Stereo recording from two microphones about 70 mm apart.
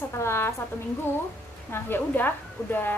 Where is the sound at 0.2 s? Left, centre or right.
Left.